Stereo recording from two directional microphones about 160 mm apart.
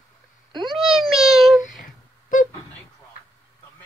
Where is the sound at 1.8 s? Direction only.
55° left (ahead or behind).